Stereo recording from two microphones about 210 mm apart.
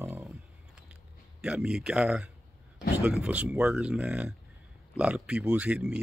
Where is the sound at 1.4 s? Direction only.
5° right (ahead or behind).